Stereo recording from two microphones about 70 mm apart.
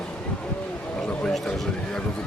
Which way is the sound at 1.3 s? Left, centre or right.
Centre.